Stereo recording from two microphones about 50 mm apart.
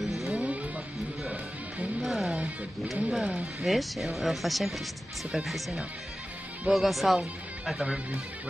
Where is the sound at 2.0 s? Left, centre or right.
Centre.